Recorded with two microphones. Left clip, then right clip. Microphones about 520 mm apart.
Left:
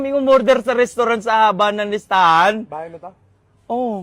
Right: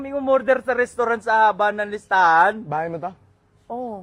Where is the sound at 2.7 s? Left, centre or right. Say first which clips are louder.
Right 5 dB; right.